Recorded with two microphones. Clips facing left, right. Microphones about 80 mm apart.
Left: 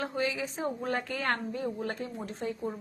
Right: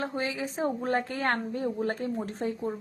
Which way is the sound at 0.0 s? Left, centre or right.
Right.